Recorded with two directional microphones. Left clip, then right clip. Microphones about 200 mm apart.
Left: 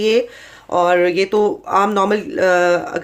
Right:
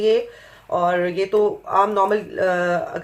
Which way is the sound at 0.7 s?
50° left (ahead or behind).